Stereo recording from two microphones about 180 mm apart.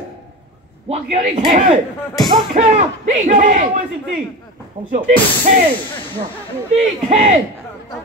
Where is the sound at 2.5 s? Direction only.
40° right (ahead or behind).